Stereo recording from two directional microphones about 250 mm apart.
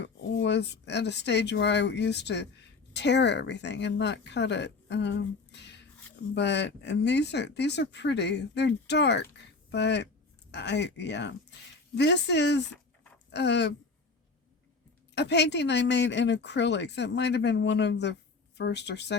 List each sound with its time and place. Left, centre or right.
0.0 s speech: left
15.1 s speech: left